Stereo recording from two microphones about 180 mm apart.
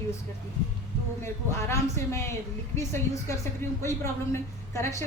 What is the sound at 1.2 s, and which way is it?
A woman's voice, 15° left (ahead or behind).